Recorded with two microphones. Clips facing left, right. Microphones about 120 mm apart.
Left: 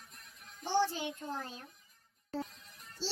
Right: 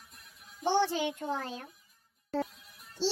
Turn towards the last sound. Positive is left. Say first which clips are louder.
# right 8 dB
turn(degrees=-70)  # may be behind; listen again after turning